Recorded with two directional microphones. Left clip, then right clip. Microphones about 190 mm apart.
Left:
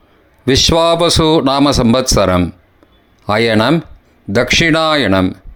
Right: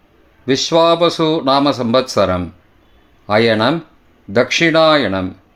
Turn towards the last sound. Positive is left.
turn(degrees=40)  # may be behind; listen again after turning